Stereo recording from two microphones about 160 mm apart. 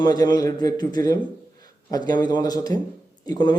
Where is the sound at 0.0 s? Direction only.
25° left (ahead or behind).